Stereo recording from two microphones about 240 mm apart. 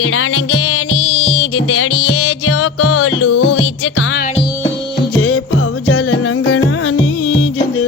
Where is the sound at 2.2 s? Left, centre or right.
Left.